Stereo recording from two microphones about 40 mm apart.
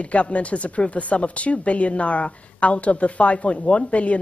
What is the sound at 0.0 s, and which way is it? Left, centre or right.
Speech, left.